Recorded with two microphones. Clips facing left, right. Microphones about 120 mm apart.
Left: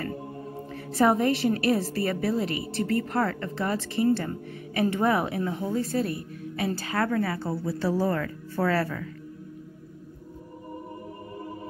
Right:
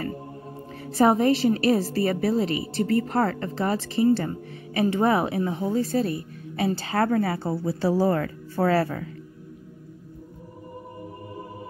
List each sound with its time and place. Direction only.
0.9 s a woman's voice: 25° right (ahead or behind)